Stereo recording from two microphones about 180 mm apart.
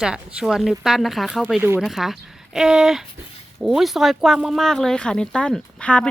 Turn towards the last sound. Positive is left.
turn(degrees=5)  # may be behind; listen again after turning